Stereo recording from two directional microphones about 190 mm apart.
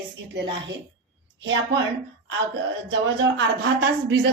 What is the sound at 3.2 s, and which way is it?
A woman's voice, 70° right (ahead or behind).